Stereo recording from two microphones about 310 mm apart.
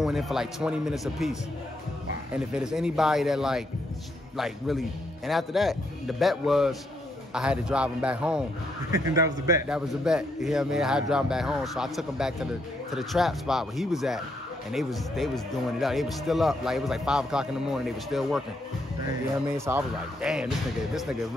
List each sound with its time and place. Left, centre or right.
0.0 s speech: centre
2.3 s speech: centre